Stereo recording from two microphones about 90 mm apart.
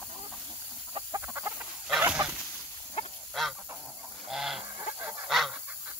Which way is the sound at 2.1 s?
10° right (ahead or behind).